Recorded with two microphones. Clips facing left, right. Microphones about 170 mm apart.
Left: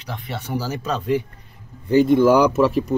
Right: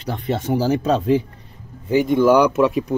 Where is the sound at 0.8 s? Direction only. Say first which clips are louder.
Right 5 dB; 25° right (ahead or behind).